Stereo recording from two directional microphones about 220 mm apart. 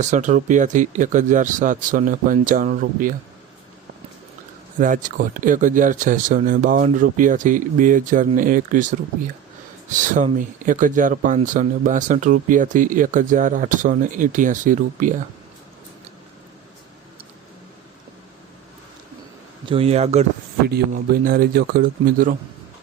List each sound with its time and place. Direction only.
0.0 s speech: 35° right (ahead or behind)
4.8 s speech: 35° right (ahead or behind)
19.6 s speech: 25° right (ahead or behind)
20.7 s speech: 45° right (ahead or behind)